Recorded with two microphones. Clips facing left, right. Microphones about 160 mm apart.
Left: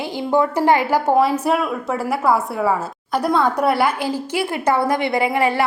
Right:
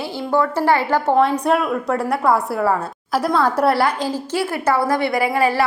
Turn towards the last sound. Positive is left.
turn(degrees=20)  # may be behind; listen again after turning